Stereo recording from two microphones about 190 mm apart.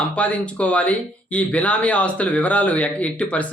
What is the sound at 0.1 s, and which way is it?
Speech, 5° left (ahead or behind).